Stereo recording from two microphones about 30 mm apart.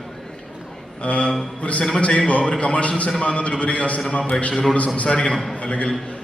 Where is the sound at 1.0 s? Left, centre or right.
Left.